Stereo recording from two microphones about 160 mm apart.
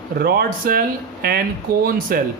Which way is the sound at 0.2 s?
70° right (ahead or behind).